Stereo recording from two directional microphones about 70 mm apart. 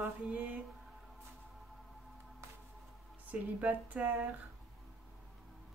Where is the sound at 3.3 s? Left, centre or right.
Right.